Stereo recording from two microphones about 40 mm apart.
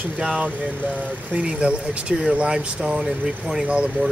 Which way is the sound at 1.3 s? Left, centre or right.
Right.